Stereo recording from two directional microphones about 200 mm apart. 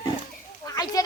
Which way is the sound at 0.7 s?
20° left (ahead or behind).